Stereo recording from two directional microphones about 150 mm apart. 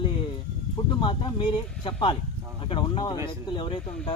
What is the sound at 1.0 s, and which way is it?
Speech, 35° left (ahead or behind).